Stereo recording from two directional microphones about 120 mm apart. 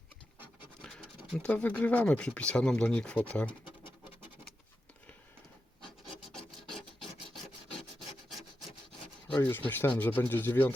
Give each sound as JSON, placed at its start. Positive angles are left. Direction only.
{"t": 0.8, "sound": "speech", "side_deg": 0}
{"t": 6.3, "sound": "filing", "side_deg": 5}
{"t": 7.7, "sound": "rub", "side_deg": 0}
{"t": 9.3, "sound": "speech", "side_deg": 15}